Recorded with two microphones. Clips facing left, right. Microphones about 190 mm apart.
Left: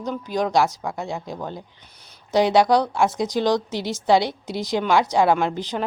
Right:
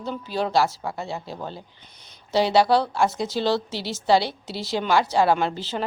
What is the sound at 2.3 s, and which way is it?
A woman's voice, 20° left (ahead or behind).